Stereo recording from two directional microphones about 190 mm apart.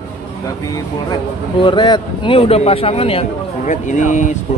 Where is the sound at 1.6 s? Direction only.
25° left (ahead or behind).